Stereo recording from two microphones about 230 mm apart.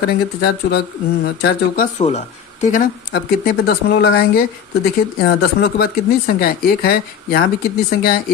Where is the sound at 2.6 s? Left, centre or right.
Left.